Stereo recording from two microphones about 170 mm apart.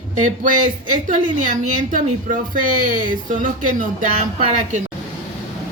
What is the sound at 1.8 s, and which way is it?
Speech, 50° right (ahead or behind).